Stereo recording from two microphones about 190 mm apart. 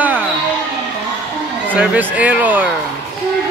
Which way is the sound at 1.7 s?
10° right (ahead or behind).